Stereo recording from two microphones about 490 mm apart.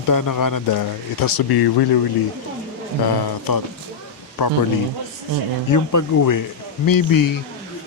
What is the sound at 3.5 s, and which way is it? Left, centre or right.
Speech, left.